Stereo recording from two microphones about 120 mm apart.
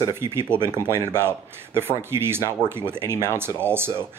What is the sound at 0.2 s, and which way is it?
Speech, 20° right (ahead or behind).